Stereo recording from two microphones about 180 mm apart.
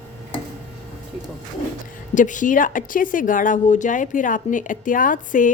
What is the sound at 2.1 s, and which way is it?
A woman's voice, 45° left (ahead or behind).